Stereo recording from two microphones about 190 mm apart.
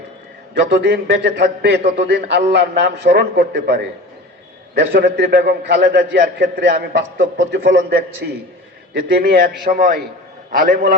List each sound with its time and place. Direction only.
0.5 s a man's voice: 65° right (ahead or behind); by 10.0 s 50° right (ahead or behind)